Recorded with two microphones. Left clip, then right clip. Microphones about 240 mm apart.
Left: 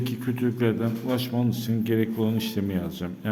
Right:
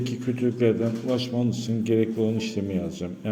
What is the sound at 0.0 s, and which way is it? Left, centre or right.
A man's voice, centre.